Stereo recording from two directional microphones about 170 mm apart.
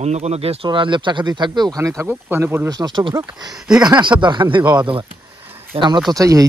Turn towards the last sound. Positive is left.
turn(degrees=-20)  # may be behind; listen again after turning